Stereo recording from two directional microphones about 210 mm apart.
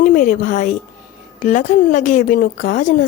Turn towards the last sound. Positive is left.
turn(degrees=35)  # may be behind; listen again after turning